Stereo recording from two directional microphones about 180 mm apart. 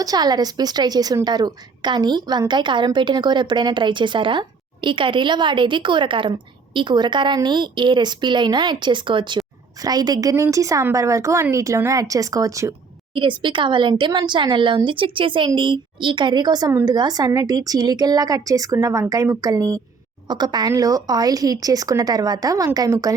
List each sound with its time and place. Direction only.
0.0 s a woman's voice: 20° right (ahead or behind)